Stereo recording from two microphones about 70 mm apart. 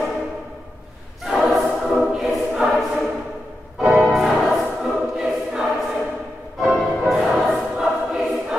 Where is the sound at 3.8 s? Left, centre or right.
Right.